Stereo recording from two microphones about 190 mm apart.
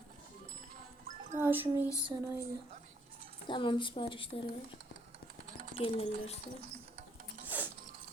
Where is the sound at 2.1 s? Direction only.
15° right (ahead or behind).